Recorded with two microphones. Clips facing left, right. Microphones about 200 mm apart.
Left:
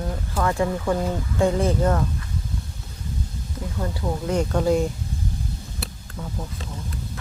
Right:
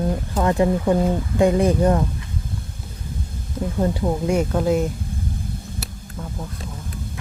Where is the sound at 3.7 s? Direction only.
25° right (ahead or behind).